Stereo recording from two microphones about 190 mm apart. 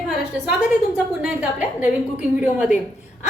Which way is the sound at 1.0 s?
5° right (ahead or behind).